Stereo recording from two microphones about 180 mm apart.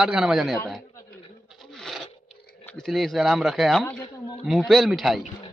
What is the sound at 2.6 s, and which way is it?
A man's voice, centre (ahead or behind).